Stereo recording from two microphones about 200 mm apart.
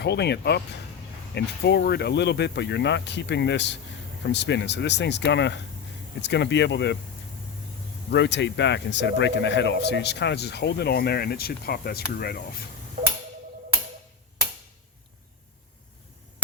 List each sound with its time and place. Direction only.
0.0 s speech: 55° left (ahead or behind)
8.1 s speech: 60° left (ahead or behind)
13.0 s a sound: 40° right (ahead or behind)